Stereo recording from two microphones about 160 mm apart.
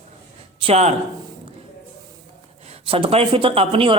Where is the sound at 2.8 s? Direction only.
35° right (ahead or behind).